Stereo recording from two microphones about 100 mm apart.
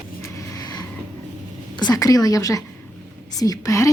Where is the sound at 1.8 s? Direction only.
40° left (ahead or behind).